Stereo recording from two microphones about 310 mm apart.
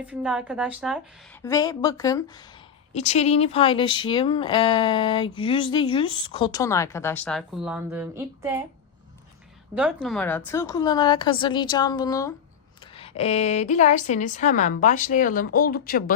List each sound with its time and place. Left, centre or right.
0.0 s a woman's voice: centre
1.4 s speech: centre
2.9 s speech: left; by 8.6 s centre
9.7 s a woman's voice: centre; by 16.1 s left